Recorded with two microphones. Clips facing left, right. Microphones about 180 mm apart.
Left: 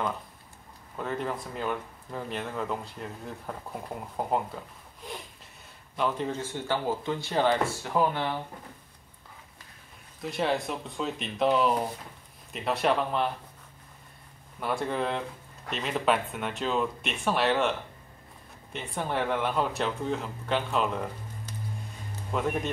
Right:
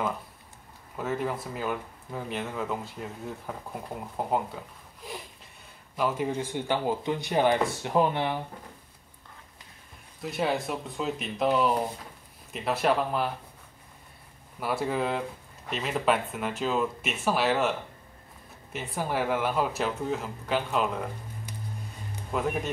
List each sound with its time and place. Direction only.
0.9 s speech: 5° right (ahead or behind)
5.9 s speech: 10° right (ahead or behind)
10.2 s speech: centre (ahead or behind)
14.6 s speech: 5° right (ahead or behind)
22.3 s speech: 5° right (ahead or behind)